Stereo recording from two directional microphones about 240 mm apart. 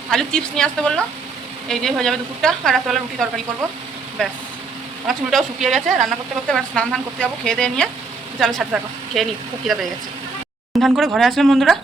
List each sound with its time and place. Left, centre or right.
0.1 s a woman's voice: centre
10.8 s a woman's voice: centre